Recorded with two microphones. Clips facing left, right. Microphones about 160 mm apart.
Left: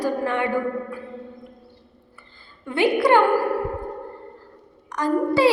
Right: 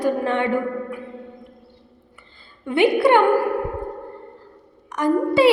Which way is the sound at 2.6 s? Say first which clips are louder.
Right 3 dB; 20° right (ahead or behind).